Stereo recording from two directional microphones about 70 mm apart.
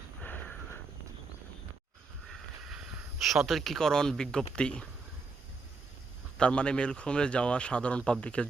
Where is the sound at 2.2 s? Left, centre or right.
Centre.